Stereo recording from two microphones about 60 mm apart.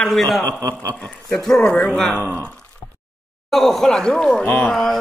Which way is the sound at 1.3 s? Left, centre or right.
Centre.